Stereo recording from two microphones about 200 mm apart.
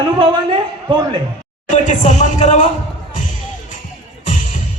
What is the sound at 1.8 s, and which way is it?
Speech, 40° left (ahead or behind).